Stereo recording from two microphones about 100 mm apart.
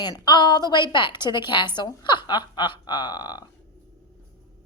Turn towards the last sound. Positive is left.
turn(degrees=45)  # may be behind; listen again after turning